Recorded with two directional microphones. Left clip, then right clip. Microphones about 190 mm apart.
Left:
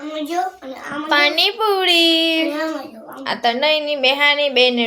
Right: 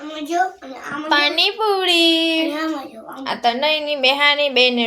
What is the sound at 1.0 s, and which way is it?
A woman's voice, 5° left (ahead or behind).